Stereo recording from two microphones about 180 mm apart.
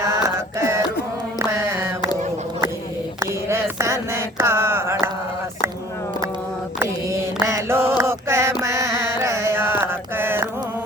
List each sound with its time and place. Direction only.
0.0 s music: 15° right (ahead or behind)
3.2 s a sound: 15° right (ahead or behind)
6.7 s mantra: 15° right (ahead or behind)
8.6 s music: 15° right (ahead or behind)